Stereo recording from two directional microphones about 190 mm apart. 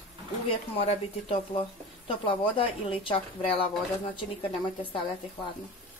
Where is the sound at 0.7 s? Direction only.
30° left (ahead or behind).